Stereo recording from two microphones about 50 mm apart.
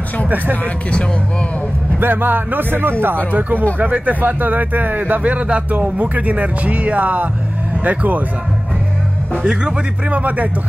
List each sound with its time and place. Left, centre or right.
2.0 s speech: right
3.3 s speech: right
9.4 s speech: centre
10.1 s speech: right